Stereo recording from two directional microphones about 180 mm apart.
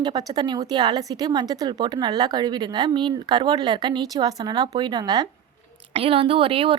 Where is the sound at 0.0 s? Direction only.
20° right (ahead or behind).